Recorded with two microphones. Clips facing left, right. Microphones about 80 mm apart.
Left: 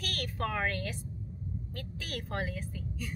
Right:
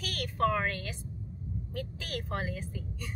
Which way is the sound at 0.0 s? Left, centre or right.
Centre.